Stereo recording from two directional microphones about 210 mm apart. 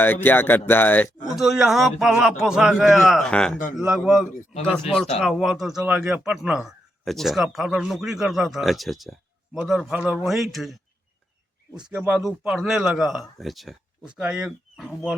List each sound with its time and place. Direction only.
0.0 s speech: 10° left (ahead or behind)
1.4 s speech: centre (ahead or behind)
11.9 s speech: 5° right (ahead or behind)